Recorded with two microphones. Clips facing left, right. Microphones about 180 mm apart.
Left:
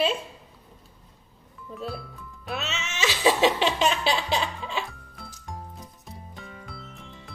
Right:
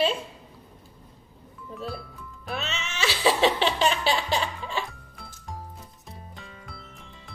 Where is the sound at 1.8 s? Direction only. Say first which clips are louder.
Left 1 dB; centre (ahead or behind).